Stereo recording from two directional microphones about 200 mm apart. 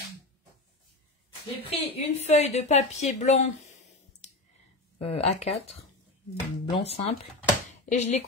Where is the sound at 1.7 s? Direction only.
30° left (ahead or behind).